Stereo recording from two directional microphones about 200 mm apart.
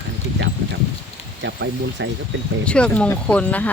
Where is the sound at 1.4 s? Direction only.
65° right (ahead or behind).